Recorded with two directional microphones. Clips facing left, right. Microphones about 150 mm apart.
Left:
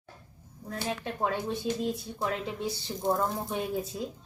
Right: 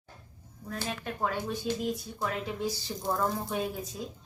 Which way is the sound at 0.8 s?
25° left (ahead or behind).